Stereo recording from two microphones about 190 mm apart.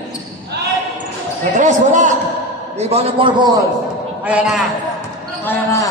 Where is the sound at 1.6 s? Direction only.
40° right (ahead or behind); by 3.6 s 20° right (ahead or behind).